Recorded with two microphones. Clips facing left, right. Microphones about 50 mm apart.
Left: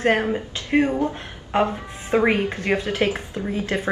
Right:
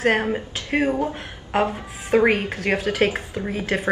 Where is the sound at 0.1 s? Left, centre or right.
Centre.